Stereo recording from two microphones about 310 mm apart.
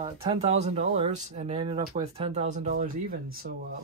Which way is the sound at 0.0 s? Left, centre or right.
Centre.